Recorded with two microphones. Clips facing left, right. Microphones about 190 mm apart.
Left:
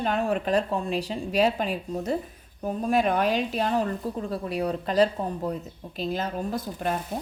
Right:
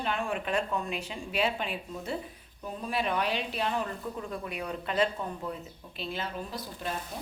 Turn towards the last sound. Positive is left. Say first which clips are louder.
# left 8 dB
turn(degrees=50)  # may be behind; listen again after turning